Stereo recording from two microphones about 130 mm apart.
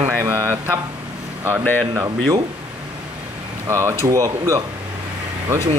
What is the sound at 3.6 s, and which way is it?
Speech, 20° right (ahead or behind).